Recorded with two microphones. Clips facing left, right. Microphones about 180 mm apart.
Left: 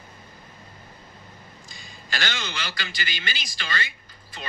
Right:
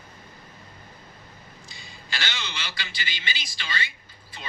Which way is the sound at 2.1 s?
50° left (ahead or behind).